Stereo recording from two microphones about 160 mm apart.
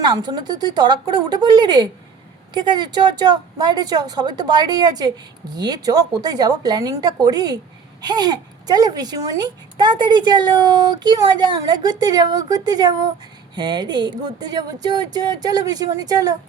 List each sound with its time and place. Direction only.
0.0 s speech: 25° right (ahead or behind)